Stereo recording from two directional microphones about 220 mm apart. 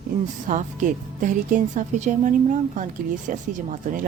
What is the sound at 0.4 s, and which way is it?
Speech, 35° right (ahead or behind).